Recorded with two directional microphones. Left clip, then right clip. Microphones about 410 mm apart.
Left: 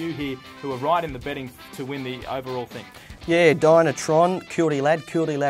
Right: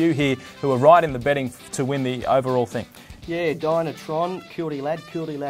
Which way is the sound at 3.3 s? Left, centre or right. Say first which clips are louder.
Left 7 dB; left.